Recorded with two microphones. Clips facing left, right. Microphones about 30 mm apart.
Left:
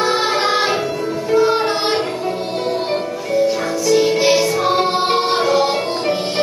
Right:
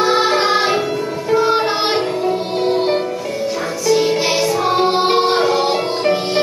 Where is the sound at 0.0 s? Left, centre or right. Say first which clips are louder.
Right 2 dB; centre.